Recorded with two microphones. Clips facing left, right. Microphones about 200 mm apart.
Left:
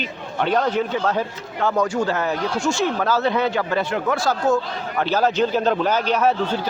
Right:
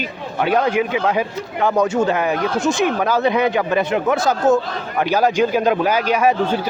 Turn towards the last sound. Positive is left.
turn(degrees=-10)  # may be behind; listen again after turning